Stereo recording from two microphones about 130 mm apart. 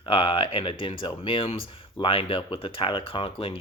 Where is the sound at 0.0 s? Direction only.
40° left (ahead or behind).